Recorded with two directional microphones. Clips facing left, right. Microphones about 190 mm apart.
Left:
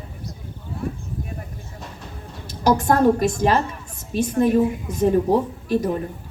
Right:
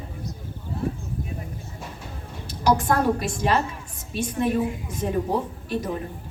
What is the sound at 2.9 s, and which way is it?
A woman's voice, 40° left (ahead or behind).